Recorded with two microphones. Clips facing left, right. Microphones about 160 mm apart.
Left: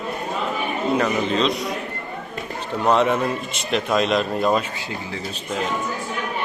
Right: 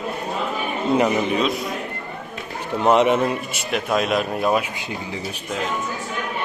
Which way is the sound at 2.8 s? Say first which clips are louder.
Right 2 dB; 20° right (ahead or behind).